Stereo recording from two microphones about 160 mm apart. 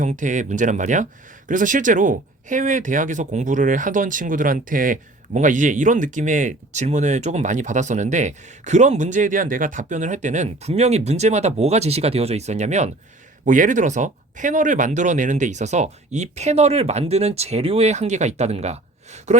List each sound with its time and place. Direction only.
0.0 s speech: 50° right (ahead or behind)